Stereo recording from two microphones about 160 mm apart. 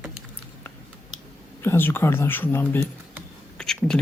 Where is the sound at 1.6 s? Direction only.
15° left (ahead or behind).